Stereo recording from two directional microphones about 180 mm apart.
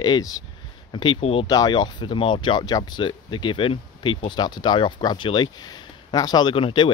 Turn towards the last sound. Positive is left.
turn(degrees=30)  # may be behind; listen again after turning